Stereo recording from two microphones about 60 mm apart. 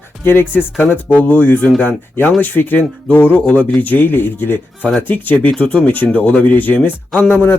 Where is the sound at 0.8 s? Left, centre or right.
Left.